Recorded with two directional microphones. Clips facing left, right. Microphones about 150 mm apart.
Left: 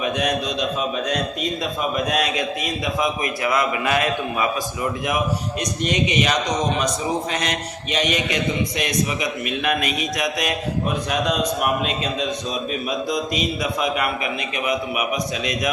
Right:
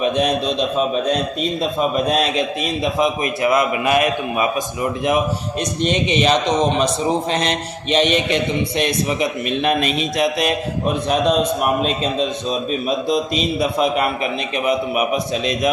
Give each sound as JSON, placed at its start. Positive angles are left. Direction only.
{"t": 0.0, "sound": "a man's voice", "side_deg": -25}
{"t": 12.9, "sound": "a man's voice", "side_deg": -25}